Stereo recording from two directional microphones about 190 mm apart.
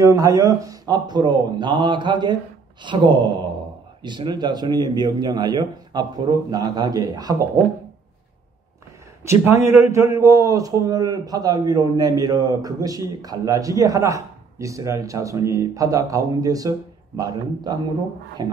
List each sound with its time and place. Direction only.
0.0 s speech: 15° right (ahead or behind)
9.2 s a man's voice: 15° right (ahead or behind)